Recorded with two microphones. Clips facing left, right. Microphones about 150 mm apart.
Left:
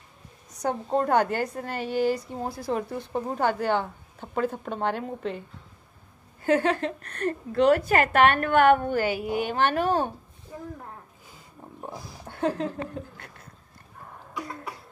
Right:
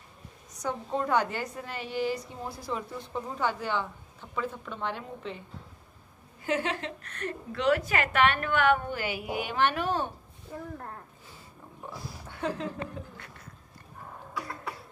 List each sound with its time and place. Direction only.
0.9 s a woman's voice: 50° left (ahead or behind)
6.4 s a woman's voice: 45° left (ahead or behind)
12.3 s a sound: 50° left (ahead or behind)